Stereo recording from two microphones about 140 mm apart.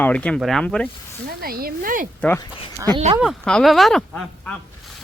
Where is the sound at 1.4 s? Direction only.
90° right.